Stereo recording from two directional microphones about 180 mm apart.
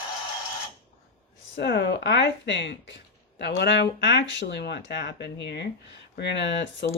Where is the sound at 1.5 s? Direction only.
70° left (ahead or behind).